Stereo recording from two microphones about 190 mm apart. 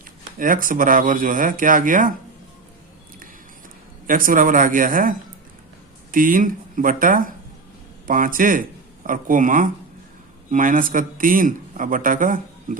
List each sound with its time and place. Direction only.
0.3 s a man's voice: 45° right (ahead or behind)
4.0 s a man's voice: 45° right (ahead or behind)